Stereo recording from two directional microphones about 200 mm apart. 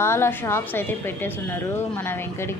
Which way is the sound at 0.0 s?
10° left (ahead or behind).